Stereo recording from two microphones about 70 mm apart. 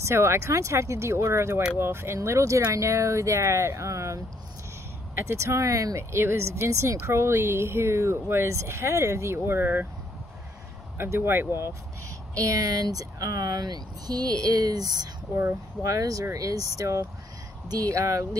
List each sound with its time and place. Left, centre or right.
0.0 s speech: right
2.1 s speech: right
6.1 s speech: right
11.0 s speech: right
12.4 s speech: right
15.3 s speech: right